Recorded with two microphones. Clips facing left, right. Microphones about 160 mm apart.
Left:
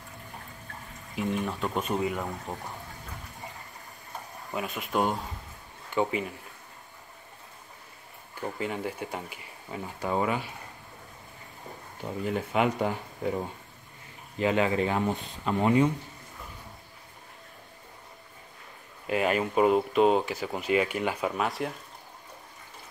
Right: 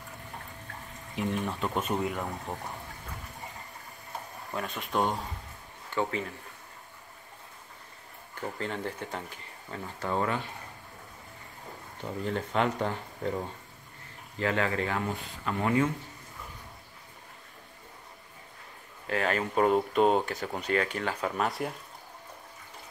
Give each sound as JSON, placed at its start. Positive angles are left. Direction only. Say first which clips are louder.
{"t": 1.1, "sound": "speech", "louder": "left 1 dB", "side_deg": 0}
{"t": 4.5, "sound": "speech", "louder": "left 2 dB", "side_deg": 5}
{"t": 8.4, "sound": "speech", "louder": "left 2 dB", "side_deg": 10}
{"t": 12.0, "sound": "speech", "louder": "left 2 dB", "side_deg": 5}
{"t": 19.0, "sound": "speech", "louder": "left 3 dB", "side_deg": 15}